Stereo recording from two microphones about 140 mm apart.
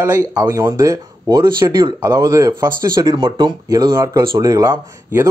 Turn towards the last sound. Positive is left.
turn(degrees=-25)  # may be behind; listen again after turning